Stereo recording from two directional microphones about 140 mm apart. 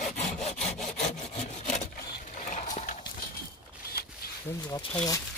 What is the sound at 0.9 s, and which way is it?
Wood, 55° left (ahead or behind).